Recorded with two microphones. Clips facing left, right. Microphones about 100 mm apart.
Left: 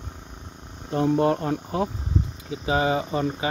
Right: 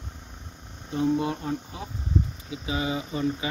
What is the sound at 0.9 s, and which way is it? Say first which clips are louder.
Speech: left 4 dB; 55° left (ahead or behind).